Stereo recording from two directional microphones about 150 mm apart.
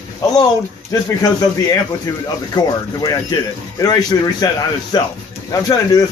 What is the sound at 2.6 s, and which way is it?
Speech, 30° left (ahead or behind).